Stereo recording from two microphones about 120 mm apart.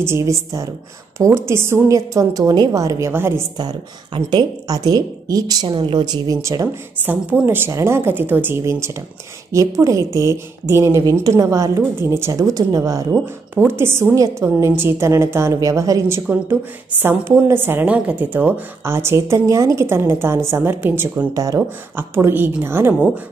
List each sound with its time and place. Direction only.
0.0 s speech: 25° right (ahead or behind)
3.5 s a woman's voice: 35° right (ahead or behind)
7.0 s a woman's voice: 15° right (ahead or behind)
13.1 s speech: 20° right (ahead or behind)
21.3 s speech: 25° right (ahead or behind)